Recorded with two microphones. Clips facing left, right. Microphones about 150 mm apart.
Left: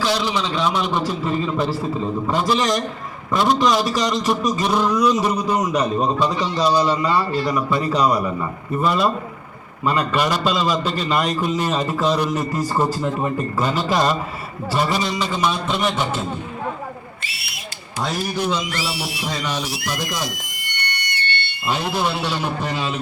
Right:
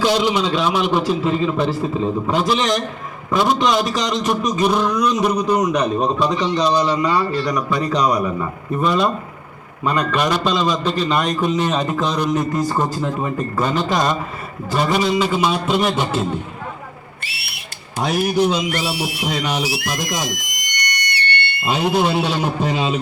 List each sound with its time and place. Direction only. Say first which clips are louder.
0.0 s speech: right 4 dB; 20° right (ahead or behind)
0.5 s a man's voice: right 3 dB; 5° right (ahead or behind)
14.9 s speech: right 5 dB; 10° right (ahead or behind)
17.2 s a sound: even; 65° right (ahead or behind)
18.0 s speech: right 6 dB; 15° right (ahead or behind)
18.7 s a sound: right 4 dB; 55° right (ahead or behind)
19.2 s speech: right 4 dB; 15° right (ahead or behind)
20.2 s a sound: right 2 dB; 85° right
20.9 s whistle: right 4 dB; 75° right (ahead or behind)
21.7 s speech: right 4 dB; 20° right (ahead or behind)